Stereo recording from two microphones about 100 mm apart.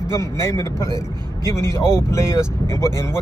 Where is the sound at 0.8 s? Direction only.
45° right (ahead or behind).